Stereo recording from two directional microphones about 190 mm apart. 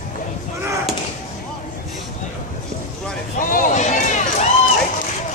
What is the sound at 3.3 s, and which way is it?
Run, 45° left (ahead or behind).